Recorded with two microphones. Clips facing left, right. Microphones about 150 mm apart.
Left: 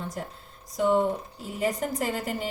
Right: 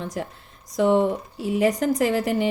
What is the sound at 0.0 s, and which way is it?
A woman's voice, 90° right.